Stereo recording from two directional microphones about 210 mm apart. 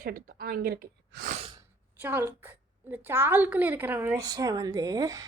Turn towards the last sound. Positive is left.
turn(degrees=-15)  # may be behind; listen again after turning